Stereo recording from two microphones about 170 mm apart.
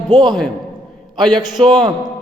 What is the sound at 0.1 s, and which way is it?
Speech, 25° right (ahead or behind).